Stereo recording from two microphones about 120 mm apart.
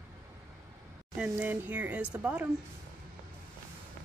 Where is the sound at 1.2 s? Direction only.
10° right (ahead or behind).